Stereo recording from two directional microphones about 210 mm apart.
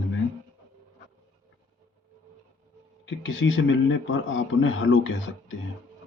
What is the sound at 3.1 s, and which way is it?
Speech, 60° left (ahead or behind).